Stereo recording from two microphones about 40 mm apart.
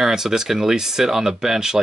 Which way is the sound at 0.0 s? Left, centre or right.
Centre.